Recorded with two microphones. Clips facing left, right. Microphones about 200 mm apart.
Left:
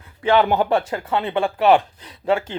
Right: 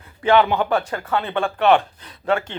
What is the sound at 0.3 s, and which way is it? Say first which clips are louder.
Speech: left 1 dB; 40° left (ahead or behind).